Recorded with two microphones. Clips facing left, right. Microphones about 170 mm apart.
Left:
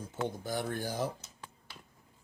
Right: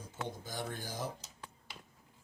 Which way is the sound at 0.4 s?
55° left (ahead or behind).